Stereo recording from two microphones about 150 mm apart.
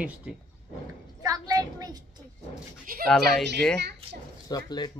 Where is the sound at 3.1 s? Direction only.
5° left (ahead or behind).